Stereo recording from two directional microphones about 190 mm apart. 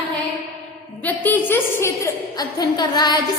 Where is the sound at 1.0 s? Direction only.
10° left (ahead or behind).